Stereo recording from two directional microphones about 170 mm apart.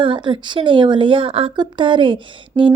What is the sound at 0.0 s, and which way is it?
A woman's voice, 30° right (ahead or behind).